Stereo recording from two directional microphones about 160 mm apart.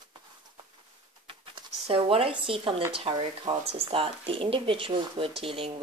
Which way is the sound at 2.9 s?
35° right (ahead or behind).